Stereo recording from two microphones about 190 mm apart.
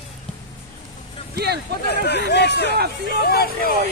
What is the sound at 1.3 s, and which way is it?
Speech, 55° right (ahead or behind).